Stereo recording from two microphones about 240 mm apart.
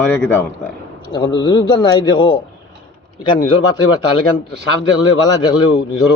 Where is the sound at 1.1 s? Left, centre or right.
Centre.